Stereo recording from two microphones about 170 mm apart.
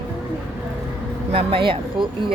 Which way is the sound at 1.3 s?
30° right (ahead or behind).